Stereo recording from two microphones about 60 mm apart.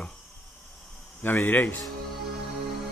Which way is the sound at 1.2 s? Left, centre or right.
Left.